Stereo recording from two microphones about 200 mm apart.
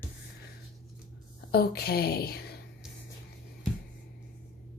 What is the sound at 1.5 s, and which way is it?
A woman's voice, 50° left (ahead or behind).